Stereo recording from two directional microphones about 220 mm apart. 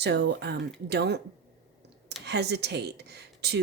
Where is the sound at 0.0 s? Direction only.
50° right (ahead or behind).